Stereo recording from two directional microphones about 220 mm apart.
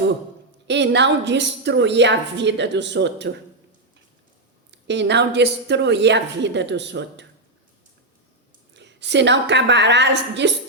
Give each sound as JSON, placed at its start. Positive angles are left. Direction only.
{"t": 0.7, "sound": "a woman's voice", "side_deg": -50}
{"t": 4.7, "sound": "a woman's voice", "side_deg": -55}
{"t": 8.7, "sound": "a woman's voice", "side_deg": -55}